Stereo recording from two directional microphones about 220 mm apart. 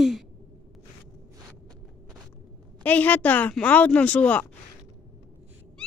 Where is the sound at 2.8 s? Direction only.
5° left (ahead or behind).